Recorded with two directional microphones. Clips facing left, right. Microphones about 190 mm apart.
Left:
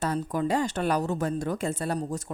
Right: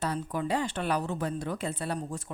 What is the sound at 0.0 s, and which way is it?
Speech, 45° left (ahead or behind).